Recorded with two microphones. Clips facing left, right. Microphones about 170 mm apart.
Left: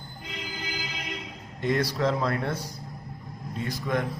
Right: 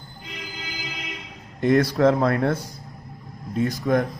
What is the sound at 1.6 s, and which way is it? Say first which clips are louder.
A man's voice: right 8 dB; 50° right (ahead or behind).